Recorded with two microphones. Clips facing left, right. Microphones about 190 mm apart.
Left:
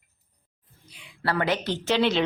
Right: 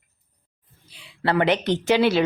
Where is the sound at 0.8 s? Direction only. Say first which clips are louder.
Right 5 dB; 30° right (ahead or behind); by 2.2 s 10° right (ahead or behind).